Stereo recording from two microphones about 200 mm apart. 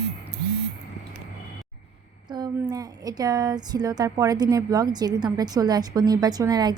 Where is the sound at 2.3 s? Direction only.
20° right (ahead or behind).